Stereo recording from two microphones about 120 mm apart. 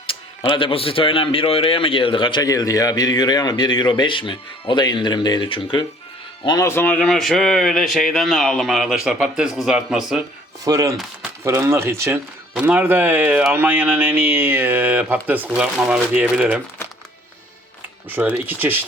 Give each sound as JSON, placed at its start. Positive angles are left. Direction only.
{"t": 0.1, "sound": "a man's voice", "side_deg": 45}
{"t": 2.4, "sound": "speech", "side_deg": 30}
{"t": 6.7, "sound": "speech", "side_deg": 15}
{"t": 10.6, "sound": "speech", "side_deg": -30}
{"t": 18.1, "sound": "speech", "side_deg": -15}